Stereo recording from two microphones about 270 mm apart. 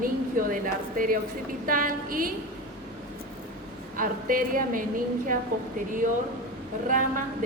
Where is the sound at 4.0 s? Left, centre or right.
Right.